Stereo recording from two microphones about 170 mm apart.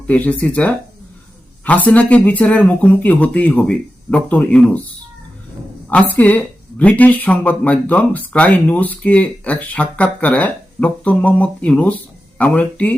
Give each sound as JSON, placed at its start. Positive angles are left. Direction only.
{"t": 0.1, "sound": "speech", "side_deg": 10}
{"t": 5.9, "sound": "speech", "side_deg": 10}